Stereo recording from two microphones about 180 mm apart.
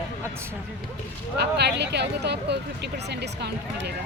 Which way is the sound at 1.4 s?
70° right (ahead or behind).